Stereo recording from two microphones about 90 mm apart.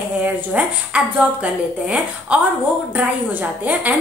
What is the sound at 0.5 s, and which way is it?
Speech, 15° right (ahead or behind).